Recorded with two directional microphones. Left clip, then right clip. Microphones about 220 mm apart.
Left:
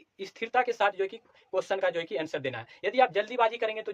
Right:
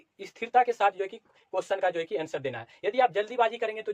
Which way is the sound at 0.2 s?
20° left (ahead or behind).